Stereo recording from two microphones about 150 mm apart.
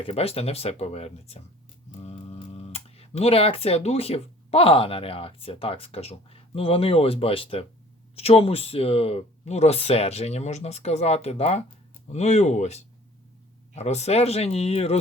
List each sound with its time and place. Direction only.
0.0 s speech: 40° left (ahead or behind)